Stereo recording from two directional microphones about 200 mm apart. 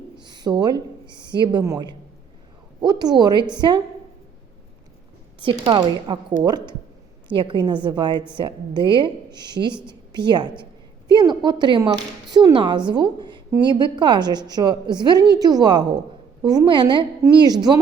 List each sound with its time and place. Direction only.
0.2 s a woman's voice: 20° right (ahead or behind)
5.4 s a woman's voice: 25° right (ahead or behind)